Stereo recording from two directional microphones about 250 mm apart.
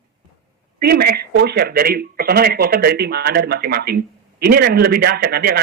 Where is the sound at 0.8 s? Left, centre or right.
Right.